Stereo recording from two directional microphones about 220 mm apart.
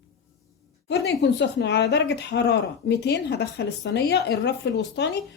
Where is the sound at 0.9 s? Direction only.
50° left (ahead or behind).